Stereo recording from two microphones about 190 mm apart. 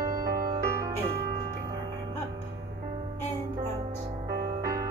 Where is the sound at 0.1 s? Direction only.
50° right (ahead or behind).